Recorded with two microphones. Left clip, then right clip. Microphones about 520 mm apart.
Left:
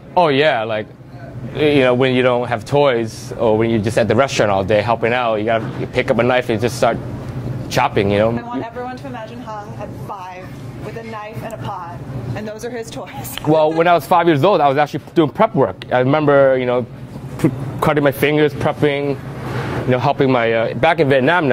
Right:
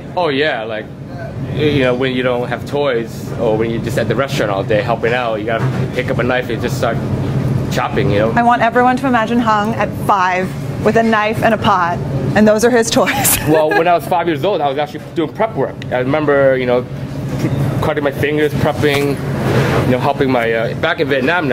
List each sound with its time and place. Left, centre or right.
0.1 s speech: left
8.4 s speech: right
12.4 s speech: right
13.7 s speech: left
17.8 s speech: left